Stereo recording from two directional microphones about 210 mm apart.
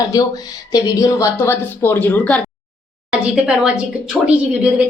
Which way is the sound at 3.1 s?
5° right (ahead or behind).